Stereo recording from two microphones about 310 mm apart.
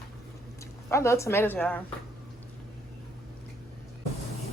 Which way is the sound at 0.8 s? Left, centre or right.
Centre.